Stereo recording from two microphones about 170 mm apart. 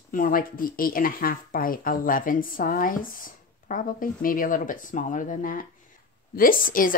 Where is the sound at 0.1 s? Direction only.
55° left (ahead or behind).